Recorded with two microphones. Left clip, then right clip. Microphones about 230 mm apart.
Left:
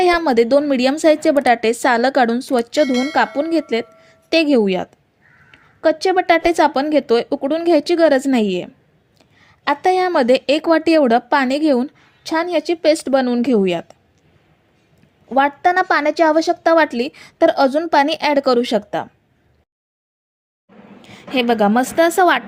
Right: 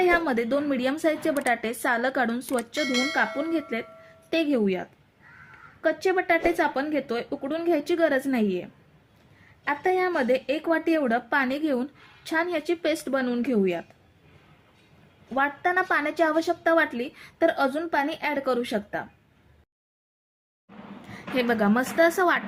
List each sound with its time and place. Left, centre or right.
0.0 s a woman's voice: left
2.8 s speech: centre
3.5 s a woman's voice: left
15.4 s a woman's voice: left
21.3 s a woman's voice: left